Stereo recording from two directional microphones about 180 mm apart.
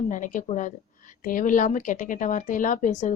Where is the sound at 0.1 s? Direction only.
45° left (ahead or behind).